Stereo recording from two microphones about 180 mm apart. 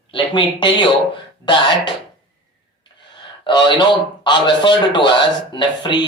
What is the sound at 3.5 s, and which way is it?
Speech, 25° left (ahead or behind).